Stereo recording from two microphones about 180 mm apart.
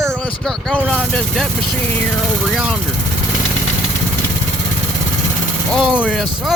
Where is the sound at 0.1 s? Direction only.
5° left (ahead or behind).